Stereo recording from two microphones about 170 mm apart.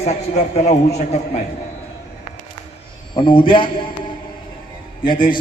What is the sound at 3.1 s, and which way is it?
Speech, 30° left (ahead or behind).